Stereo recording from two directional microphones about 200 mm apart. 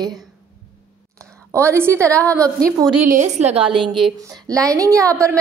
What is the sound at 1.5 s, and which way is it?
Speech, 15° right (ahead or behind).